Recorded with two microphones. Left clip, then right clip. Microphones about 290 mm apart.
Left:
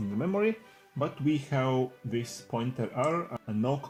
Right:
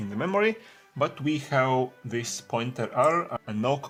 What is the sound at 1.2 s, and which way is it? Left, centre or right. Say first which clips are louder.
Speech: right 3 dB; right.